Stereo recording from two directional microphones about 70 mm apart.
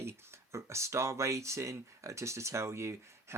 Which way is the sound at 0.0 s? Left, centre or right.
Right.